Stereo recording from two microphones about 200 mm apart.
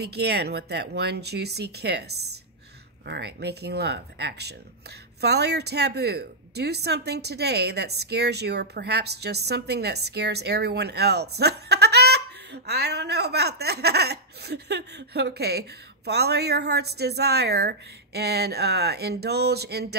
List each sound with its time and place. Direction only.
0.0 s speech: 55° right (ahead or behind)